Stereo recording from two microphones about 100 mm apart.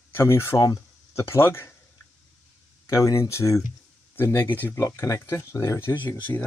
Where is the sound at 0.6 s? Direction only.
35° left (ahead or behind).